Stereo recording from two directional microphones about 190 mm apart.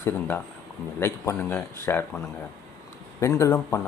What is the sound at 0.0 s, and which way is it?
A man's voice, 10° left (ahead or behind).